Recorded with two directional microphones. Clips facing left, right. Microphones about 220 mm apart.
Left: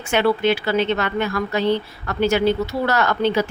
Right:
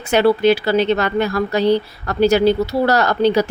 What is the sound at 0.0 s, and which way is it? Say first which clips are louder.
Speech: right 5 dB; 35° right (ahead or behind).